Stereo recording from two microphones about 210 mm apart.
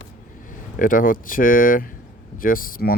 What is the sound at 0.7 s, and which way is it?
Speech, 40° left (ahead or behind).